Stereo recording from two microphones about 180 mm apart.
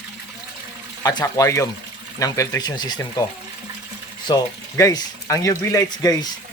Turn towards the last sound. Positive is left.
turn(degrees=20)  # may be behind; listen again after turning